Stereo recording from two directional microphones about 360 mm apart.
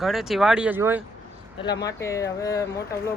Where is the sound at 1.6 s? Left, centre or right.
Centre.